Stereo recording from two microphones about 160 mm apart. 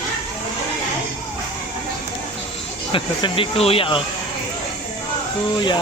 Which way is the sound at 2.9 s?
35° left (ahead or behind).